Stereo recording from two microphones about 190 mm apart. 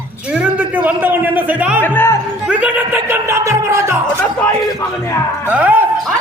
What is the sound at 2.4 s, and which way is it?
A man's voice, 10° right (ahead or behind).